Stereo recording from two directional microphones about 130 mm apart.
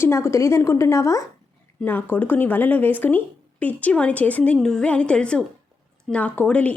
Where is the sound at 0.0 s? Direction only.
20° left (ahead or behind).